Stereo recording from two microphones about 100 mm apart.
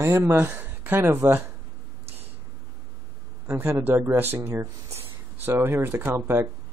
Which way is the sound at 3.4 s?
25° right (ahead or behind).